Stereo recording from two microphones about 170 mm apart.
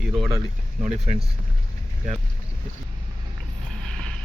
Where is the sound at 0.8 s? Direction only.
45° right (ahead or behind).